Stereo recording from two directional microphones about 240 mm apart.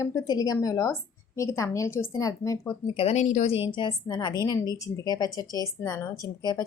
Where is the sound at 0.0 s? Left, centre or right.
Centre.